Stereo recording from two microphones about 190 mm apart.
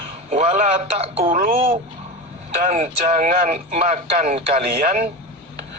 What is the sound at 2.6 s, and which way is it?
A man's voice, 40° right (ahead or behind).